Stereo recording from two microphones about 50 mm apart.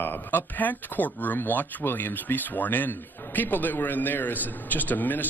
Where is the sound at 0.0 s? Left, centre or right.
Left.